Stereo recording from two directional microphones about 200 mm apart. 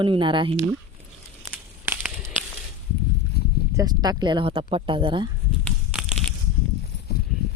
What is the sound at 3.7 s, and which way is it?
Speech, 20° right (ahead or behind).